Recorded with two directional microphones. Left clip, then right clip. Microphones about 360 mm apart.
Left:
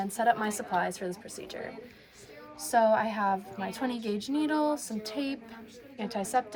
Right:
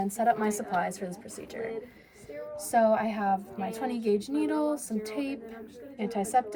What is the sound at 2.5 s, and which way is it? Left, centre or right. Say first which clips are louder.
A woman's voice: even; centre.